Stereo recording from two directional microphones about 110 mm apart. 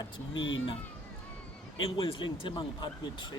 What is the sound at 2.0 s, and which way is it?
Speech, 50° left (ahead or behind).